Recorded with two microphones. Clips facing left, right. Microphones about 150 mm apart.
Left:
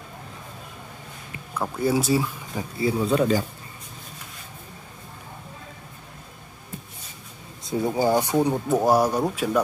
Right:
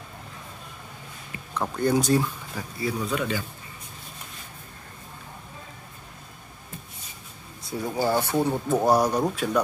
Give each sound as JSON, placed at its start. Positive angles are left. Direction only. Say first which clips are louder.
{"t": 1.5, "sound": "speech", "louder": "even", "side_deg": 5}
{"t": 2.5, "sound": "speech", "louder": "left 7 dB", "side_deg": 25}
{"t": 7.6, "sound": "speech", "louder": "left 4 dB", "side_deg": 20}